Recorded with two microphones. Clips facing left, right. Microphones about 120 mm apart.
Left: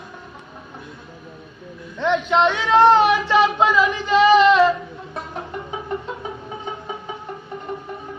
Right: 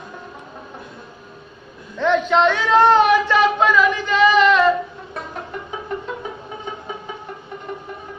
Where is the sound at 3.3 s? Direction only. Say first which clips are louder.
Even; 20° left (ahead or behind).